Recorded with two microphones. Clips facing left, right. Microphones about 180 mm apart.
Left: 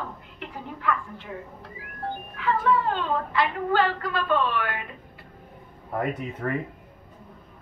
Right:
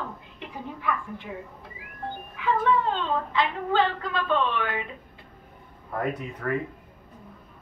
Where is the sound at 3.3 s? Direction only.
20° right (ahead or behind).